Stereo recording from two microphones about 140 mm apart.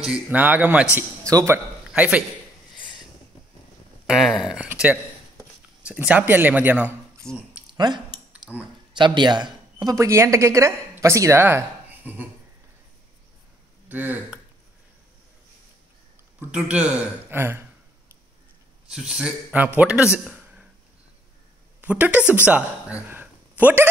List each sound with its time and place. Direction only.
0.0 s a woman's voice: 10° right (ahead or behind)
0.9 s speech: 20° right (ahead or behind)
1.9 s a man's voice: 10° right (ahead or behind)
4.1 s a woman's voice: centre (ahead or behind)
7.2 s speech: 5° left (ahead or behind)
7.7 s speech: 30° right (ahead or behind)
8.3 s a sound: 10° right (ahead or behind)
8.9 s a woman's voice: 35° right (ahead or behind); by 12.3 s 15° right (ahead or behind)
13.8 s speech: 10° right (ahead or behind)
16.3 s a woman's voice: 10° right (ahead or behind)
18.9 s speech: 5° right (ahead or behind)
21.8 s a woman's voice: 10° right (ahead or behind)